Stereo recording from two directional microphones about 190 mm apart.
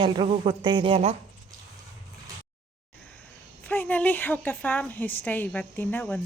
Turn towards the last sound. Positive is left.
turn(degrees=10)  # may be behind; listen again after turning